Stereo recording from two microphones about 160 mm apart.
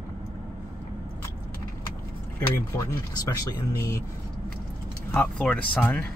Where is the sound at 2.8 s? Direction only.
20° left (ahead or behind).